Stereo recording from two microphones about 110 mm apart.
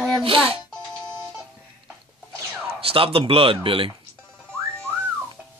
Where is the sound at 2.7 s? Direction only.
60° right (ahead or behind).